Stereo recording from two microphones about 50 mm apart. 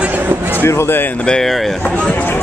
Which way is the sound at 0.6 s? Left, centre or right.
Left.